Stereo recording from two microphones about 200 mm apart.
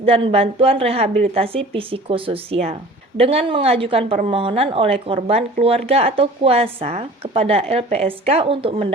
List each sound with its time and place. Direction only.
0.0 s speech: 30° right (ahead or behind)